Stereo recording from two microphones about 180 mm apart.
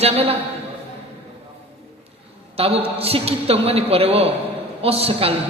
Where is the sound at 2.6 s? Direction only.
35° right (ahead or behind).